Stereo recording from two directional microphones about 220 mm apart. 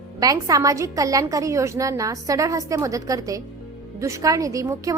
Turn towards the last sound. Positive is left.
turn(degrees=-15)  # may be behind; listen again after turning